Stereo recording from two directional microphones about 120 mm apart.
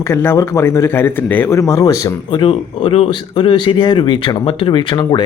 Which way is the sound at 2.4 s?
50° left (ahead or behind).